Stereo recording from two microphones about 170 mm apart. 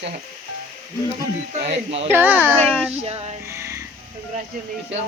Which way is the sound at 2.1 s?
10° right (ahead or behind).